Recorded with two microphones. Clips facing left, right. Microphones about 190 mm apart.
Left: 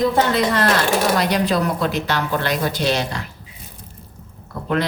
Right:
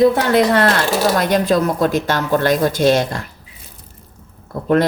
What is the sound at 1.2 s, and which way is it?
Speech, 50° right (ahead or behind).